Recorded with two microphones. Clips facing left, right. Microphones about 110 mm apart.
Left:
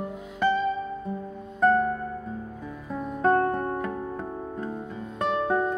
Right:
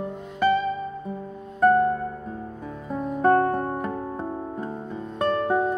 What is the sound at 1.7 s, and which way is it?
Music, 10° right (ahead or behind).